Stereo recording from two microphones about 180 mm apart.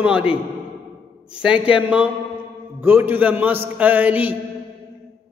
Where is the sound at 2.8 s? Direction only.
10° right (ahead or behind).